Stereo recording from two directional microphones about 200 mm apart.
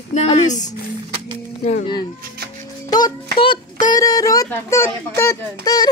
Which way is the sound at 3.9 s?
20° left (ahead or behind).